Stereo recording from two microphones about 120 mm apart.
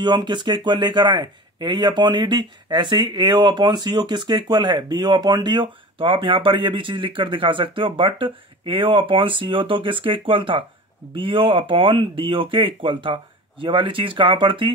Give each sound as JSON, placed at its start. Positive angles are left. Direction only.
{"t": 0.0, "sound": "speech", "side_deg": -40}